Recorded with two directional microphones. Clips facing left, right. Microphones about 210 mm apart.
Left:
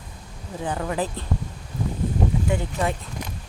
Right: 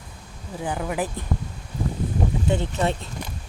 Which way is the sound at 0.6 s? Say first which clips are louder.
Even; 10° right (ahead or behind).